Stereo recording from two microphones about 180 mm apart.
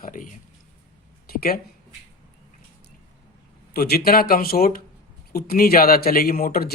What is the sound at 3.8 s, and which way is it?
Speech, 60° left (ahead or behind).